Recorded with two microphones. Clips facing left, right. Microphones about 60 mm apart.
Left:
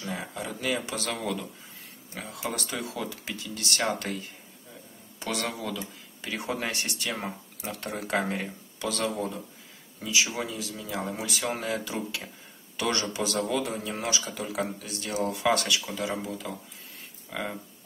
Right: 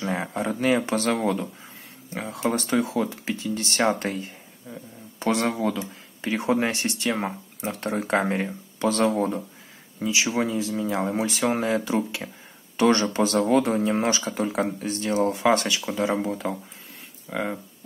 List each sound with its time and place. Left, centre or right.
0.0 s speech: right
5.2 s speech: right
17.3 s speech: centre